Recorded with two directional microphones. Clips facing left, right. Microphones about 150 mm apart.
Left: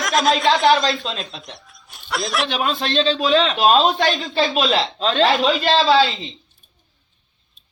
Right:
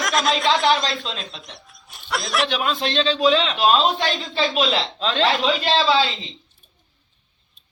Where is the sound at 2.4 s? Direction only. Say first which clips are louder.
Left 1 dB; 40° left (ahead or behind).